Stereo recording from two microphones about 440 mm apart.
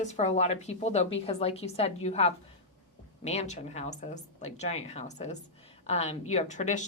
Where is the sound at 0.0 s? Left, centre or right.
Centre.